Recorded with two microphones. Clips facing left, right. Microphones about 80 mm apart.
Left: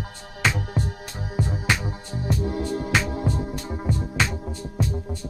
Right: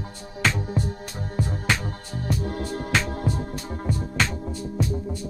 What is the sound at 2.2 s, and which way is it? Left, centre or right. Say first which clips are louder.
Music: left 2 dB; right.